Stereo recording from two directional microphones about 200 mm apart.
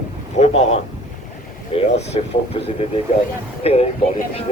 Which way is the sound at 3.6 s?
30° left (ahead or behind).